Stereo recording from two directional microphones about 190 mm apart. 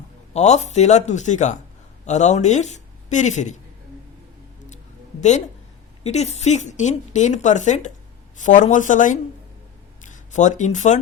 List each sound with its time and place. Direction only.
0.3 s speech: 35° left (ahead or behind)
6.0 s speech: 35° left (ahead or behind)